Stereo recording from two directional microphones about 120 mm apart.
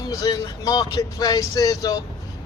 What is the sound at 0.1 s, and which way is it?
Speech, 30° left (ahead or behind).